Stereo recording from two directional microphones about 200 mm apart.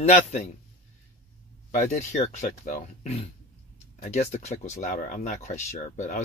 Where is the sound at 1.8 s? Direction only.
35° left (ahead or behind).